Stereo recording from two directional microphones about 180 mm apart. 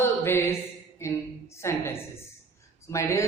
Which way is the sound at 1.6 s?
15° left (ahead or behind).